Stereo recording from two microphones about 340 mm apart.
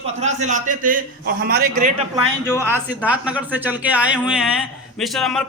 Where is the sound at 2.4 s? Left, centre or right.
Centre.